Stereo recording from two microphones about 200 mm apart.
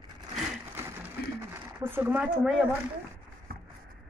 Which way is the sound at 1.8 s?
10° right (ahead or behind).